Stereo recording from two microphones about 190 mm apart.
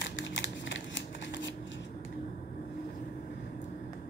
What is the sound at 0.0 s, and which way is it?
Shuffling cards, 75° left (ahead or behind).